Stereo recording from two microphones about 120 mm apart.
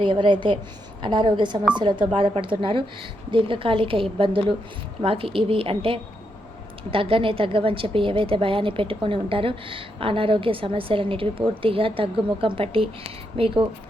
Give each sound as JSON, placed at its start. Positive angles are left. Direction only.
{"t": 0.0, "sound": "a woman's voice", "side_deg": -45}